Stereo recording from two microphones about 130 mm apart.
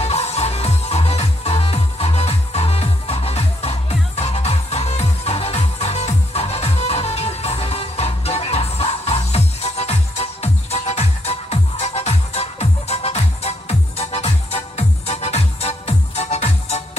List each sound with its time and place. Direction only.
0.0 s music: 55° left (ahead or behind)